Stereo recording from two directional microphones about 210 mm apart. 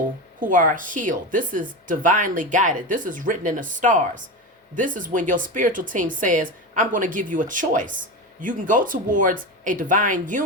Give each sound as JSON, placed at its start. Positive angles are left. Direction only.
{"t": 0.3, "sound": "speech", "side_deg": -40}